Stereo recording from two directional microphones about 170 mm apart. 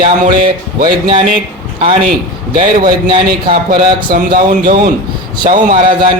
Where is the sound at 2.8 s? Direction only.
30° right (ahead or behind).